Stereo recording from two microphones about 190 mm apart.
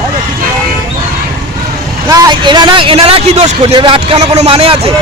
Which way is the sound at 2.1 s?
20° right (ahead or behind).